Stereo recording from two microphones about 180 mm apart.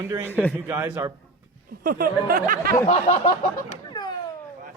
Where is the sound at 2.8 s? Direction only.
40° left (ahead or behind).